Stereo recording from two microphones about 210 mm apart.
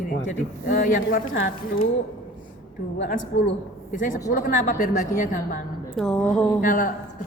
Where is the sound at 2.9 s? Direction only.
45° left (ahead or behind).